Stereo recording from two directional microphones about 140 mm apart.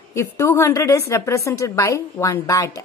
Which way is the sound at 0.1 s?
20° left (ahead or behind).